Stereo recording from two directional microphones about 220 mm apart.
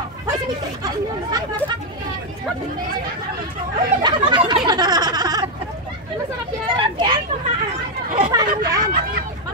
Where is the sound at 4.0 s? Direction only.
20° right (ahead or behind).